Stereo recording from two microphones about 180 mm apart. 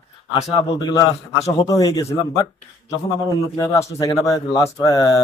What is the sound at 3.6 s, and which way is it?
A man's voice, 20° left (ahead or behind).